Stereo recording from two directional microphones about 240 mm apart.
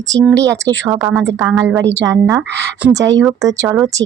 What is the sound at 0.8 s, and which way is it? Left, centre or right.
Speech, centre.